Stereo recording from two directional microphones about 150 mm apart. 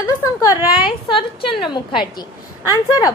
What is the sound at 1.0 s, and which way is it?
A woman's voice, 35° left (ahead or behind).